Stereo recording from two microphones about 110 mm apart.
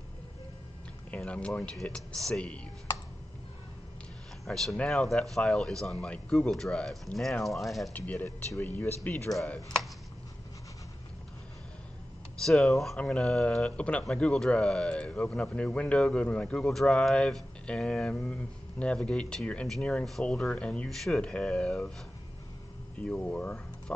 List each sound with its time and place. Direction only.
1.1 s speech: 10° left (ahead or behind)
4.5 s speech: 5° left (ahead or behind)
7.9 s speech: 15° left (ahead or behind)
12.4 s speech: 5° left (ahead or behind)
22.9 s speech: 10° left (ahead or behind)